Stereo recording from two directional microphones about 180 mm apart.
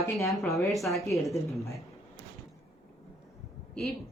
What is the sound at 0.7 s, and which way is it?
Speech, centre (ahead or behind).